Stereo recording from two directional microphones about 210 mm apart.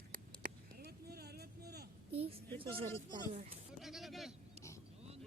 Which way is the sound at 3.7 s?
Centre (ahead or behind).